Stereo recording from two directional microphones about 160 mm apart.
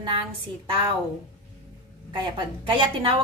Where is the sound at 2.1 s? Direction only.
30° right (ahead or behind).